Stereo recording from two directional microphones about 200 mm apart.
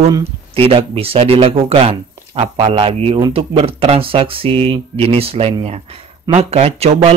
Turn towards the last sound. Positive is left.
turn(degrees=-30)  # may be behind; listen again after turning